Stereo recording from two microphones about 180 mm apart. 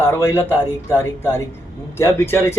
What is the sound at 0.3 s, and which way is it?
Speech, 10° left (ahead or behind).